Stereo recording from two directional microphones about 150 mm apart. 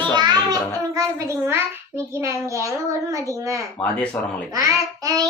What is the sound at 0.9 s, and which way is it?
A child's voice, 15° right (ahead or behind).